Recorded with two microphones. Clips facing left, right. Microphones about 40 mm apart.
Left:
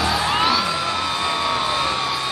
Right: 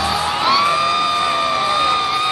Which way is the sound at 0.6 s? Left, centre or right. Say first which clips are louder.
Right 7 dB; right.